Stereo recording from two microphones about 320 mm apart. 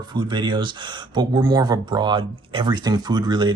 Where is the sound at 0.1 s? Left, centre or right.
Centre.